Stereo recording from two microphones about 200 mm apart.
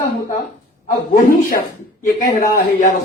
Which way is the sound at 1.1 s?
45° left (ahead or behind).